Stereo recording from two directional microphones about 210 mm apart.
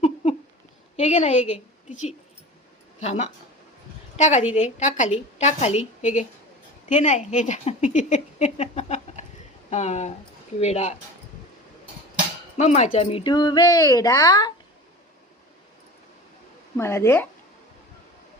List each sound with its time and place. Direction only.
0.0 s a sound: 30° left (ahead or behind)
0.9 s a woman's voice: 30° left (ahead or behind)
3.0 s a woman's voice: 30° left (ahead or behind)
12.5 s speech: 35° left (ahead or behind)
16.7 s speech: 10° left (ahead or behind)